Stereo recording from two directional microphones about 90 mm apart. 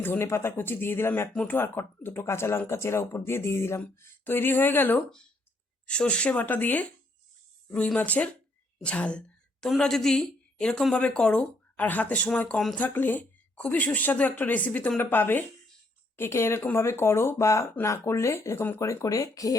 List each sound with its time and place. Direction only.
0.0 s speech: 25° left (ahead or behind)
5.9 s a woman's voice: 10° left (ahead or behind)
7.9 s a woman's voice: 15° left (ahead or behind)
19.0 s speech: 40° left (ahead or behind)